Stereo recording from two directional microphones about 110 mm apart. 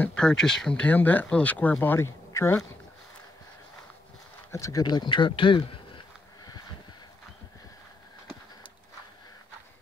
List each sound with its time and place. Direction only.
0.0 s speech: 10° left (ahead or behind); by 2.6 s 25° left (ahead or behind)
4.5 s speech: 30° left (ahead or behind); by 6.0 s 50° left (ahead or behind)